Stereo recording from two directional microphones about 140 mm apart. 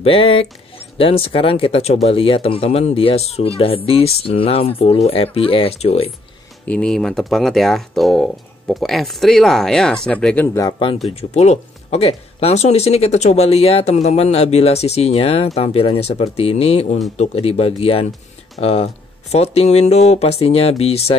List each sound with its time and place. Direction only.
0.0 s speech: 40° left (ahead or behind)
6.7 s speech: 5° left (ahead or behind)
10.6 s speech: 35° left (ahead or behind)
11.1 s speech: 50° left (ahead or behind)